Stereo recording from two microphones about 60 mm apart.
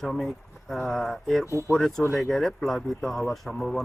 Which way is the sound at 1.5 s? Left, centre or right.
Left.